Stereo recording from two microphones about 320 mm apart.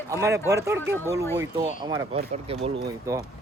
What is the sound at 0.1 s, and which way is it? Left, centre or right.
Speech, centre.